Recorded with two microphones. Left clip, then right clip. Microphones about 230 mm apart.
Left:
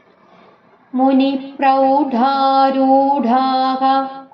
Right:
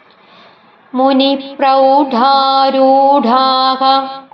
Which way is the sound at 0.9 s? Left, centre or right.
Right.